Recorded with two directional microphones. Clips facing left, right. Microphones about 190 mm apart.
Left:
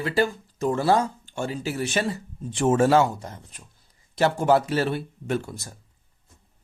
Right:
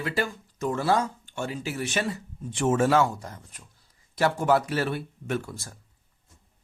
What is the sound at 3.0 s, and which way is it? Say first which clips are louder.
Speech: left 2 dB; 20° left (ahead or behind).